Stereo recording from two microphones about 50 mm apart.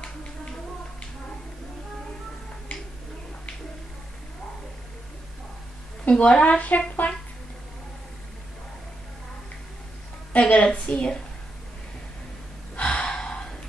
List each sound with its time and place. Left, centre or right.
6.0 s a woman's voice: left
10.4 s a woman's voice: left
12.8 s gasp: centre